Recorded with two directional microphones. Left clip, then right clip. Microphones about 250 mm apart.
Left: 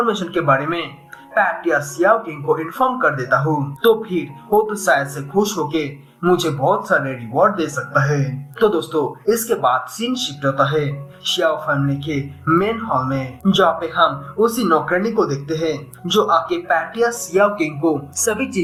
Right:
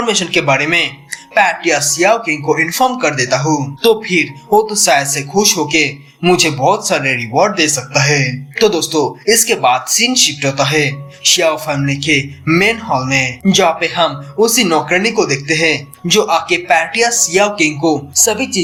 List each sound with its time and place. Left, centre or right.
0.0 s speech: right
6.2 s speech: right